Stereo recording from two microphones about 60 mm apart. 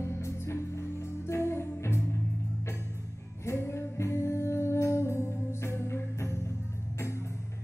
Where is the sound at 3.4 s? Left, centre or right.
Left.